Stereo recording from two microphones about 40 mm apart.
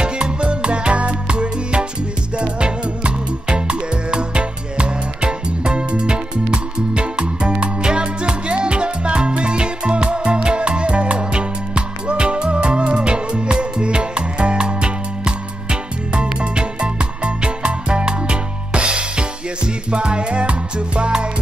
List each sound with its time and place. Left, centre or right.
0.0 s music: right